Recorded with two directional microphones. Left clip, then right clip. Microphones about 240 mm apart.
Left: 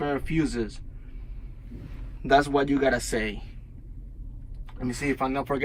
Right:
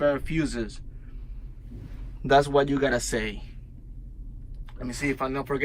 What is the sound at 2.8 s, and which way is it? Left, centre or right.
Speech, centre.